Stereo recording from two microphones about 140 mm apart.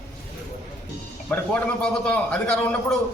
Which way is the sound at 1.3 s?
10° left (ahead or behind).